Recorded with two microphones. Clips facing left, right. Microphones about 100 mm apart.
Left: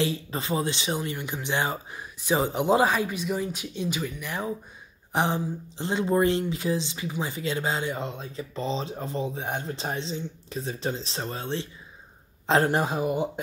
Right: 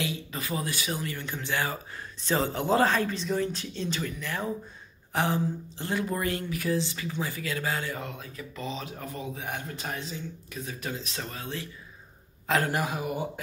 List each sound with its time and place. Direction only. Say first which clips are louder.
0.0 s speech: left 6 dB; 30° left (ahead or behind)